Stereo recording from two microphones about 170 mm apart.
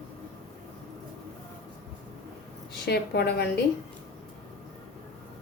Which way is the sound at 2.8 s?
75° left (ahead or behind).